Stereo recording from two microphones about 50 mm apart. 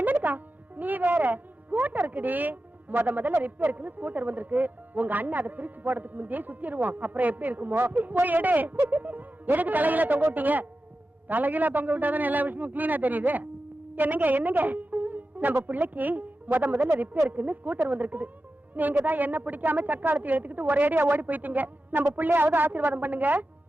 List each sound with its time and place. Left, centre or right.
0.0 s a woman's voice: right